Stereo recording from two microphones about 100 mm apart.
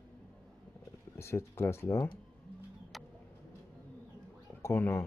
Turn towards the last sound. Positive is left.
turn(degrees=25)  # may be behind; listen again after turning